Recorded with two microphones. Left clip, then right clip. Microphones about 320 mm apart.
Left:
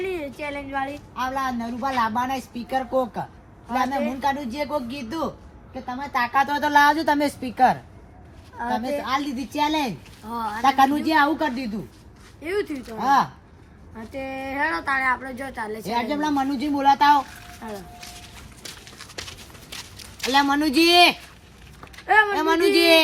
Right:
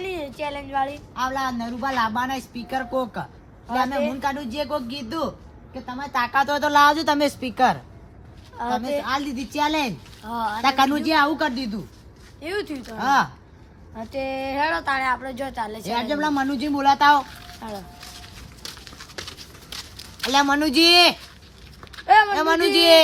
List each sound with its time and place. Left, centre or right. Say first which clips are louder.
0.0 s speech: even; right
1.2 s a woman's voice: right 1 dB; centre
12.4 s speech: left 2 dB; right
15.8 s a woman's voice: even; centre
20.3 s a woman's voice: right 1 dB; centre